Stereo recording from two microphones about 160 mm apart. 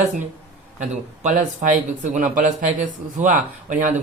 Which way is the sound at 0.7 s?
50° right (ahead or behind).